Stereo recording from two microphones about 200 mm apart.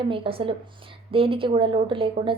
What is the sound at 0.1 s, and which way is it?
A woman's voice, 25° right (ahead or behind).